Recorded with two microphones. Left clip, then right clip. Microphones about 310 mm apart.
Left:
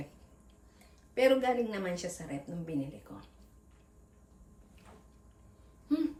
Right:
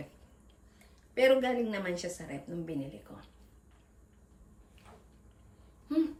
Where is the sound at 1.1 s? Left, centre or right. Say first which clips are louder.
Right 1 dB; centre.